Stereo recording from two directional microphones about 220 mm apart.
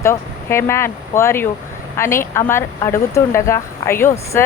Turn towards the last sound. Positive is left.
turn(degrees=10)  # may be behind; listen again after turning